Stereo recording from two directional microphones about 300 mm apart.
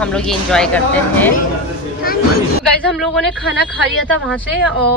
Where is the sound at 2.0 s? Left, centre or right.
Left.